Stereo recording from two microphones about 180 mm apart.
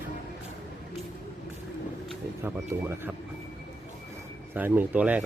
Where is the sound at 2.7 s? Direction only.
15° right (ahead or behind).